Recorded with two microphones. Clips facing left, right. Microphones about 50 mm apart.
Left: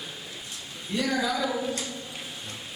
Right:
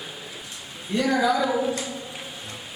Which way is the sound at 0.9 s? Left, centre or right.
Centre.